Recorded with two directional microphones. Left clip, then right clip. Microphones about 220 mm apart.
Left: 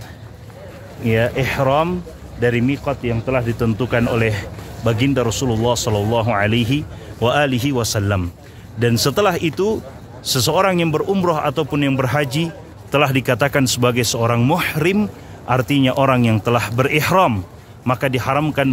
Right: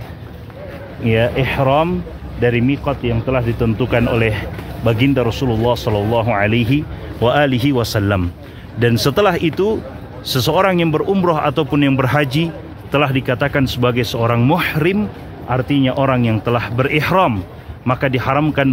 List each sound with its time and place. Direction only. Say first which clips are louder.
1.0 s a man's voice: right 2 dB; 5° left (ahead or behind)
12.9 s a man's voice: even; 25° left (ahead or behind)
15.0 s a man's voice: even; 30° left (ahead or behind); by 18.7 s 10° left (ahead or behind)